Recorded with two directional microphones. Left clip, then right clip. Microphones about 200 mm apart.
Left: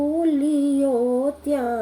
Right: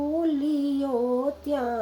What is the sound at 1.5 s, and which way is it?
Female singing, 5° left (ahead or behind).